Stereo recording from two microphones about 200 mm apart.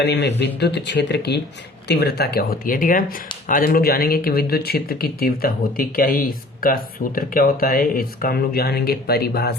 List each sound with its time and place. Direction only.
0.0 s speech: 55° left (ahead or behind)